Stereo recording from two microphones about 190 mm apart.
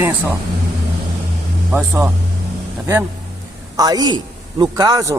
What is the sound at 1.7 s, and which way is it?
Speech, 10° right (ahead or behind).